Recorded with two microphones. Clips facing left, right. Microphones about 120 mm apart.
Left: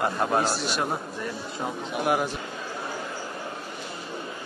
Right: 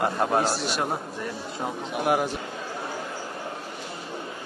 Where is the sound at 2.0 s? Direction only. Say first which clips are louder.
Right 1 dB; 45° right (ahead or behind).